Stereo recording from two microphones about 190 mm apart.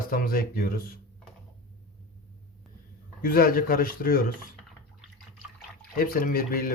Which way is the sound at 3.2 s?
50° left (ahead or behind).